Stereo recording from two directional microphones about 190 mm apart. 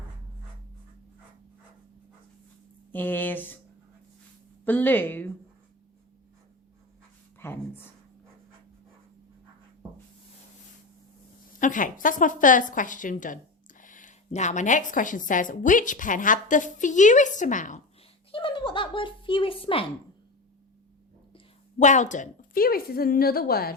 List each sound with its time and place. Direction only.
2.9 s a woman's voice: 10° left (ahead or behind)
4.6 s a woman's voice: 10° left (ahead or behind)
7.3 s a sound: 10° left (ahead or behind)
11.6 s a woman's voice: 45° left (ahead or behind)
18.3 s speech: 25° left (ahead or behind)
21.3 s a woman's voice: 40° left (ahead or behind)